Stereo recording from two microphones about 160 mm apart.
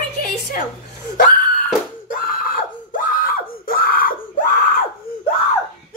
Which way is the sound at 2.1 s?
60° left (ahead or behind).